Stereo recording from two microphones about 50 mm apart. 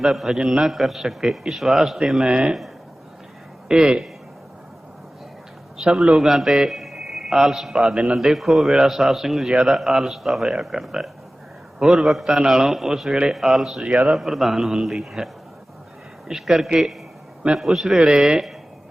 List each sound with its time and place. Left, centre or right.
0.0 s a man's voice: centre
2.2 s speech: centre
3.7 s a man's voice: centre
5.8 s a man's voice: centre
13.1 s a man's voice: centre
13.3 s a man's voice: centre
16.3 s a man's voice: centre